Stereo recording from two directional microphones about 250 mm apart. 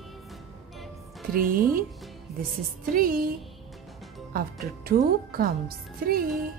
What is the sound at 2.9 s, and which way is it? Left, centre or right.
Music, right.